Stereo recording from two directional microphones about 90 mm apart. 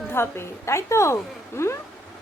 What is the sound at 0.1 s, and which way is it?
A woman's voice, 25° left (ahead or behind).